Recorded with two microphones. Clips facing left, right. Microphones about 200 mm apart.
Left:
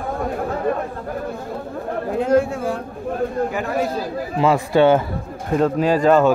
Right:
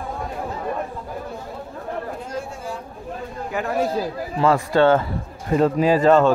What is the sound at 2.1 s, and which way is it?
A man's voice, 65° left (ahead or behind).